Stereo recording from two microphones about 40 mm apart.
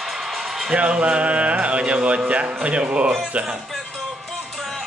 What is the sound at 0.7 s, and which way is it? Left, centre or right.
Speech, right.